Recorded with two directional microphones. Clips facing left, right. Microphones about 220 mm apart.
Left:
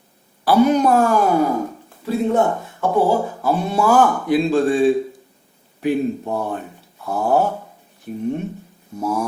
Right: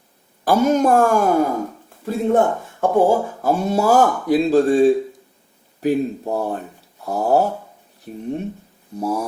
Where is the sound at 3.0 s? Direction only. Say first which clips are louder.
Right 1 dB; 45° right (ahead or behind).